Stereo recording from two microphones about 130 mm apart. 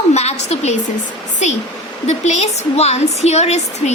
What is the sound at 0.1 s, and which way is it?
Speech, 55° left (ahead or behind).